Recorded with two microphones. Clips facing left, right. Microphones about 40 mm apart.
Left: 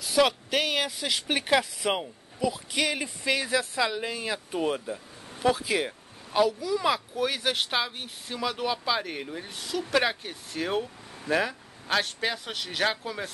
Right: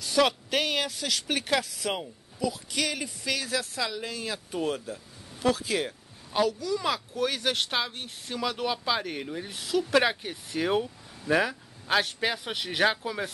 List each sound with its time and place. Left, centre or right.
0.0 s speech: centre